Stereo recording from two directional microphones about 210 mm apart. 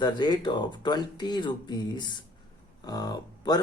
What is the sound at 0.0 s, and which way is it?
A man's voice, 20° left (ahead or behind).